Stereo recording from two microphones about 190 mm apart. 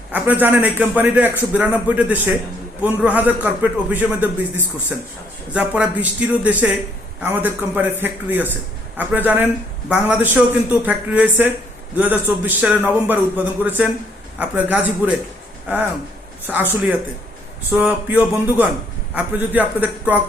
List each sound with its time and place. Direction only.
0.1 s a man's voice: 10° right (ahead or behind)
17.7 s a man's voice: 10° right (ahead or behind)